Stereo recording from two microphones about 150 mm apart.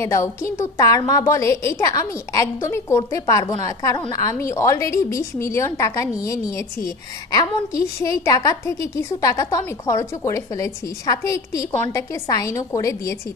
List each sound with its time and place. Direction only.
0.0 s a woman's voice: 20° left (ahead or behind)